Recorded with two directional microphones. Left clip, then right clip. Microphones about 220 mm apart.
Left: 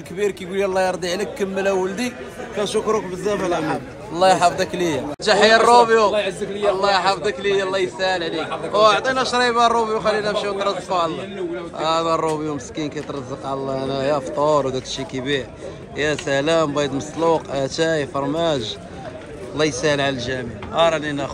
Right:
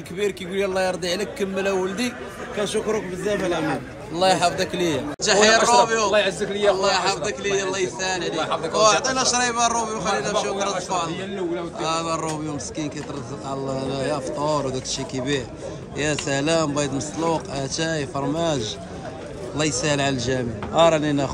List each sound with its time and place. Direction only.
0.2 s a man's voice: centre (ahead or behind); by 21.3 s 30° right (ahead or behind)